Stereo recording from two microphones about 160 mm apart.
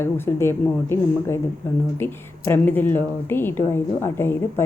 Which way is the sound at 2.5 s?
10° left (ahead or behind).